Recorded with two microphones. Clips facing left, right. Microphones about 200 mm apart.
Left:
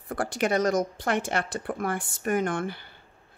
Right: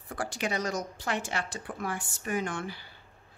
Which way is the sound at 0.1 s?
55° left (ahead or behind).